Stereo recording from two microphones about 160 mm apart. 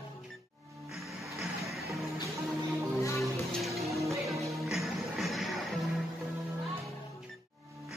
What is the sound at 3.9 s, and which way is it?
Music, 20° right (ahead or behind).